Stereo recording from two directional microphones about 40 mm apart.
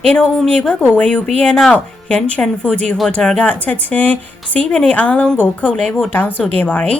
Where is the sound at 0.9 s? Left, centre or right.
Left.